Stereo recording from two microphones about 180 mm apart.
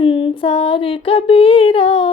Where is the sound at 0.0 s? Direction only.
30° left (ahead or behind).